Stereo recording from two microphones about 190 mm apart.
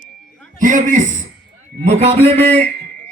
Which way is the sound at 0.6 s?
45° right (ahead or behind).